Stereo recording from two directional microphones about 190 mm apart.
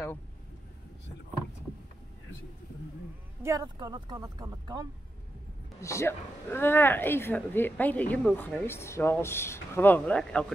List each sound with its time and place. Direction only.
3.4 s speech: 20° right (ahead or behind)
5.8 s speech: 15° left (ahead or behind)